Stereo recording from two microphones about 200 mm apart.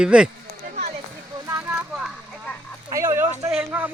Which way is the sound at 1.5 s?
10° right (ahead or behind).